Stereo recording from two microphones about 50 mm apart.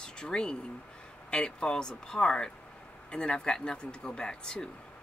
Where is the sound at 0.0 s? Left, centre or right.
Centre.